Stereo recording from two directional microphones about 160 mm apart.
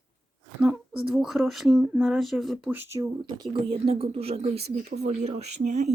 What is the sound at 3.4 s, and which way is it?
Speech, 35° right (ahead or behind).